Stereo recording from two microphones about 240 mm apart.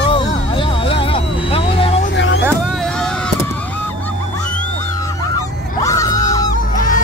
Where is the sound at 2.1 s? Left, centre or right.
Left.